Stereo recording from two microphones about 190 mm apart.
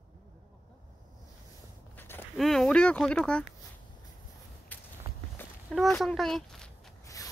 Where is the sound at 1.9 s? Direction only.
10° left (ahead or behind).